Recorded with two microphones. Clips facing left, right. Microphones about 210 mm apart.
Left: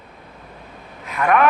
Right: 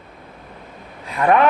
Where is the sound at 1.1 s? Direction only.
30° right (ahead or behind).